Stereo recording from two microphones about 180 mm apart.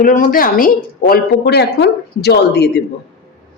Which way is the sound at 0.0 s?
50° left (ahead or behind).